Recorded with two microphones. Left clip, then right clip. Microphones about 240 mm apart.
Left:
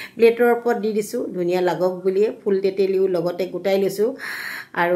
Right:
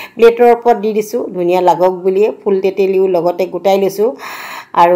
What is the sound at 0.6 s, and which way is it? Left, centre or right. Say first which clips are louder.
Speech: right 9 dB; centre.